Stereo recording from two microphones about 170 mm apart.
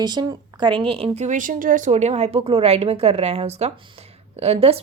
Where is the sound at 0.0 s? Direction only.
25° right (ahead or behind).